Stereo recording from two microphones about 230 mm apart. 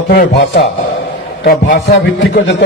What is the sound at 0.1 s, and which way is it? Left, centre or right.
A man's voice, left.